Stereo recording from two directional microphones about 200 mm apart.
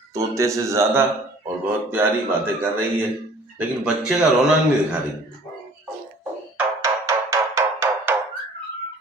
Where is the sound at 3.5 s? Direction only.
5° right (ahead or behind).